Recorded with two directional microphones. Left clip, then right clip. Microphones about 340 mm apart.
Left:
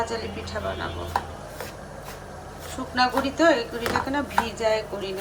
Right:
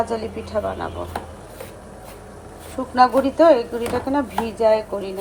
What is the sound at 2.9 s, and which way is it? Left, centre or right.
Speech, centre.